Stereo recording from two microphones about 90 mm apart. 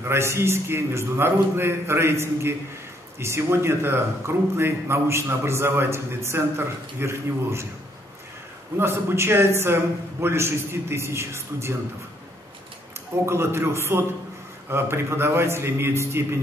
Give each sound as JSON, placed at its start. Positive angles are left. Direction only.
{"t": 0.0, "sound": "a man's voice", "side_deg": -30}
{"t": 8.7, "sound": "a man's voice", "side_deg": -30}
{"t": 13.2, "sound": "a man's voice", "side_deg": -30}